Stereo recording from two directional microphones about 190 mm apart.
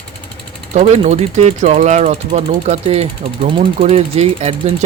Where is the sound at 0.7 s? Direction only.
35° right (ahead or behind).